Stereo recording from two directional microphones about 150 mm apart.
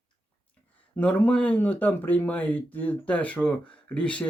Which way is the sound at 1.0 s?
10° left (ahead or behind).